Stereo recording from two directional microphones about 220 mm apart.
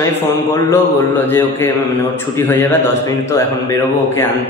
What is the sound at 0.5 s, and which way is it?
Mantra, 10° left (ahead or behind).